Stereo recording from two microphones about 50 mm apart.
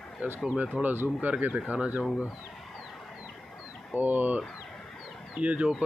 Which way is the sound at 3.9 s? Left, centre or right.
Right.